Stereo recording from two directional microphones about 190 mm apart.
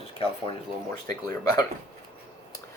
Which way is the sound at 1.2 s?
15° left (ahead or behind).